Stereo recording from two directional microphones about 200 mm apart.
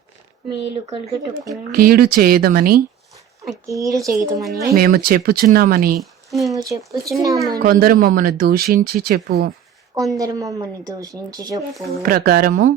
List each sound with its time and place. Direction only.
1.7 s speech: 45° right (ahead or behind)
3.7 s a woman's voice: 15° right (ahead or behind)
4.6 s speech: 45° right (ahead or behind)
6.0 s a sound: centre (ahead or behind)
6.5 s a woman's voice: 15° right (ahead or behind)
7.6 s speech: 50° right (ahead or behind)
9.9 s a woman's voice: 15° right (ahead or behind)
12.0 s speech: 50° right (ahead or behind)